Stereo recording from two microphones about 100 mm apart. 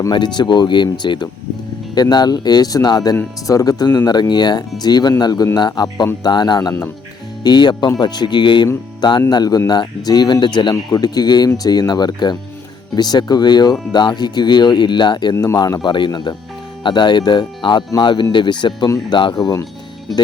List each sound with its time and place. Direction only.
0.1 s speech: 45° left (ahead or behind)